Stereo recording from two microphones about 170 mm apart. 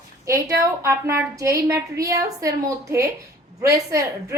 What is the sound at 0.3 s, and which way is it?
A woman's voice, 15° right (ahead or behind).